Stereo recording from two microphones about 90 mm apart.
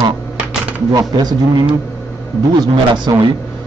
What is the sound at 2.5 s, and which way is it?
Speech, 55° right (ahead or behind).